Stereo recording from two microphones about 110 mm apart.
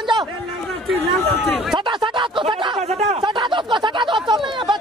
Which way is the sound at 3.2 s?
45° right (ahead or behind).